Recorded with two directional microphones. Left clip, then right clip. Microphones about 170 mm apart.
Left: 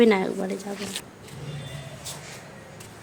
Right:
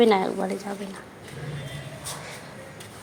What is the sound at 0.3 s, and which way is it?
Speech, 15° left (ahead or behind).